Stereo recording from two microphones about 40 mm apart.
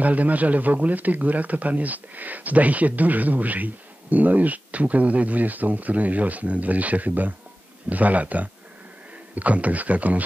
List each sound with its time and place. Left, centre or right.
0.0 s a man's voice: right